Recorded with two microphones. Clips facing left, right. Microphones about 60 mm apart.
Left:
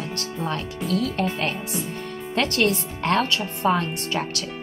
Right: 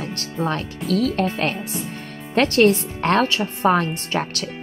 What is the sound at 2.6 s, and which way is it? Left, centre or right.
Speech, right.